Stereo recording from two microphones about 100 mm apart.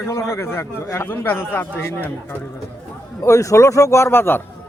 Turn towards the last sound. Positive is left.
turn(degrees=20)  # may be behind; listen again after turning